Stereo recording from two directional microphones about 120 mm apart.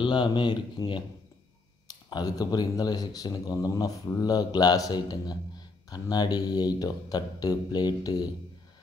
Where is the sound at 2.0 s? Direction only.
35° left (ahead or behind).